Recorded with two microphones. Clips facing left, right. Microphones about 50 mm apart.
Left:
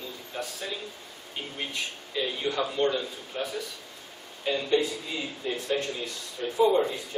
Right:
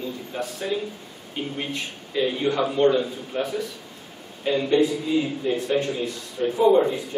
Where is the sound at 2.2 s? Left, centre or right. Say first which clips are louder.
Right 6 dB; centre.